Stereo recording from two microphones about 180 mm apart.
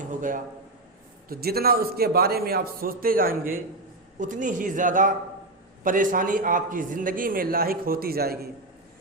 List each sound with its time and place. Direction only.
0.0 s a man's voice: 45° right (ahead or behind)
1.3 s a man's voice: 60° right (ahead or behind)